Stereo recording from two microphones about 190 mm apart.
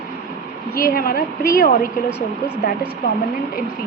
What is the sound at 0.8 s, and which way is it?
A woman's voice, 50° left (ahead or behind).